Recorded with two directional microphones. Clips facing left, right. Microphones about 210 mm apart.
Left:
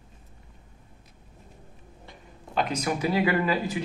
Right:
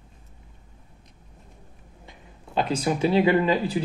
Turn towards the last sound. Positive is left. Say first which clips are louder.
# right 4 dB
turn(degrees=-25)  # may be behind; listen again after turning